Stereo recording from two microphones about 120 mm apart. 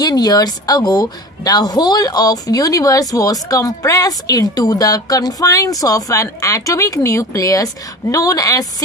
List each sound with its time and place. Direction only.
0.0 s a woman's voice: 30° left (ahead or behind)